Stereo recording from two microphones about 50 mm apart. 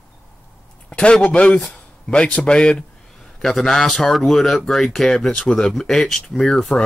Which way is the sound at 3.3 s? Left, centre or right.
Centre.